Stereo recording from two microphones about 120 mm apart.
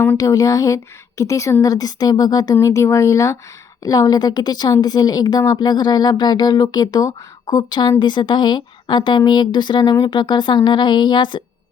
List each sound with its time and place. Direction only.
0.2 s a woman's voice: 30° left (ahead or behind)